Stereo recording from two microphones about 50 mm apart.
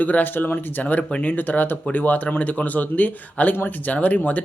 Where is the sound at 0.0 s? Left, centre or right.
Left.